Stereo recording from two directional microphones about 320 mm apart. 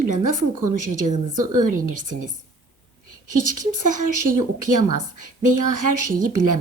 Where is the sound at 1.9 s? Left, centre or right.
Right.